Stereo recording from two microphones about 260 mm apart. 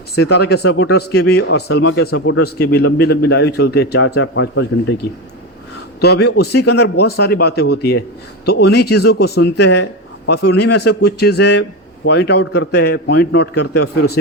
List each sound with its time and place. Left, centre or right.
0.2 s a man's voice: left
6.0 s a man's voice: left